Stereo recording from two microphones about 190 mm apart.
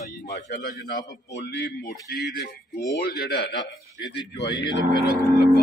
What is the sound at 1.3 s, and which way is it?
A man's voice, 60° left (ahead or behind).